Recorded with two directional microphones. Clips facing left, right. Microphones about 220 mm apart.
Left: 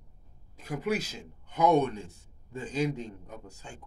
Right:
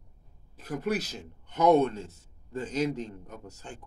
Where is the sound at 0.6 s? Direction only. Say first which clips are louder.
Even; 10° left (ahead or behind).